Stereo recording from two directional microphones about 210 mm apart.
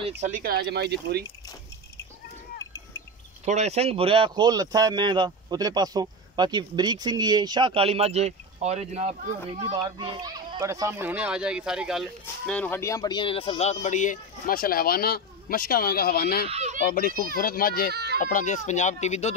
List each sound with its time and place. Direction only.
0.2 s speech: 40° right (ahead or behind)
2.6 s a sound: 15° left (ahead or behind)
3.4 s speech: 30° right (ahead or behind); by 16.4 s 45° left (ahead or behind)
16.4 s speech: 30° right (ahead or behind)
17.4 s a child's voice: 45° left (ahead or behind)
17.9 s speech: 50° right (ahead or behind)
18.2 s speech: 35° left (ahead or behind)